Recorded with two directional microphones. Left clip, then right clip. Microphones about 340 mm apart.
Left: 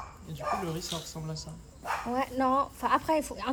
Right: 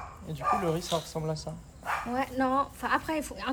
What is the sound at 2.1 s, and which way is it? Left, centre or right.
Speech, left.